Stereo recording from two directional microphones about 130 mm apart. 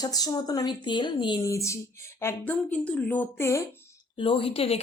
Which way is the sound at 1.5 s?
25° left (ahead or behind).